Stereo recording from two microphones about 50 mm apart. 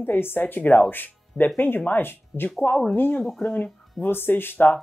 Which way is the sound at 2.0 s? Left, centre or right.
Left.